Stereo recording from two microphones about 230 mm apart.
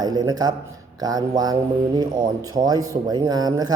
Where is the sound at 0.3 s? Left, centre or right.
Centre.